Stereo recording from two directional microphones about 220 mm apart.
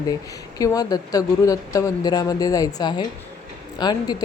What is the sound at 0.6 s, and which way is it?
Speech, 15° left (ahead or behind).